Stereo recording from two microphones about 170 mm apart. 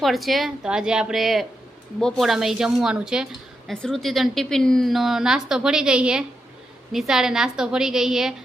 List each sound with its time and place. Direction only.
0.0 s a woman's voice: centre (ahead or behind)